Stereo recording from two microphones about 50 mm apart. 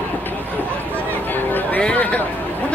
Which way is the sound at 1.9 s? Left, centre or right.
Left.